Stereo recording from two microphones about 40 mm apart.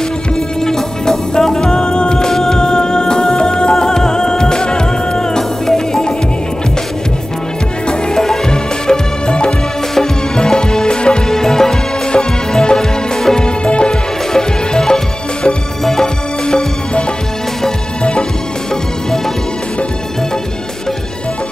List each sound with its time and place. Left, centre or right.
0.6 s music: centre
8.1 s music: centre
11.2 s music: centre
13.7 s music: left
14.3 s music: centre